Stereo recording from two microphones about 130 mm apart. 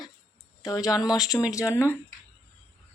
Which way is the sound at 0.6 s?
25° left (ahead or behind).